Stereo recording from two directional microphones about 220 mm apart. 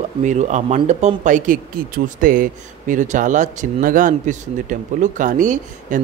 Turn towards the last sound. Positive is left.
turn(degrees=-35)  # may be behind; listen again after turning